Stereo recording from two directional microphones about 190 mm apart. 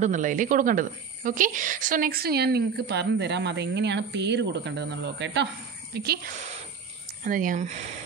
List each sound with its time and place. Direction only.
0.0 s a woman's voice: 40° right (ahead or behind)
6.3 s a sound: 40° right (ahead or behind)
7.2 s speech: 45° right (ahead or behind)